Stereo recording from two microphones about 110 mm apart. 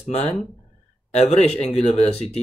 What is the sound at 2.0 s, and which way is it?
Speech, 70° left (ahead or behind).